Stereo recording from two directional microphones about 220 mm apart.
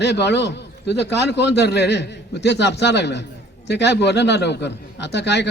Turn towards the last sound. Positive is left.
turn(degrees=50)  # may be behind; listen again after turning